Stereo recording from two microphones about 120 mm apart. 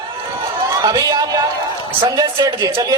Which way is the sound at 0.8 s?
30° right (ahead or behind).